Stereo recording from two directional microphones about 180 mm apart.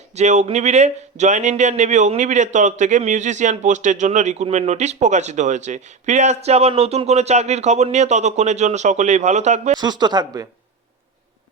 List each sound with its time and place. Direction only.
0.2 s speech: 40° right (ahead or behind)
9.7 s speech: 25° right (ahead or behind)